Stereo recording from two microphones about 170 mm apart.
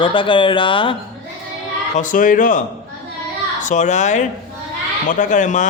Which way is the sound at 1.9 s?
50° left (ahead or behind).